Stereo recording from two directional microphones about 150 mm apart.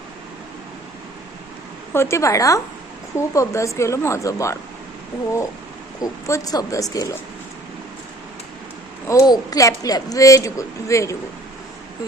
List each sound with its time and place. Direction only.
1.9 s a woman's voice: 15° left (ahead or behind)
6.0 s a woman's voice: 20° left (ahead or behind)
9.0 s a woman's voice: 25° left (ahead or behind)